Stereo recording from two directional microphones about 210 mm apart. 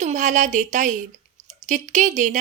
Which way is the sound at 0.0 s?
35° right (ahead or behind).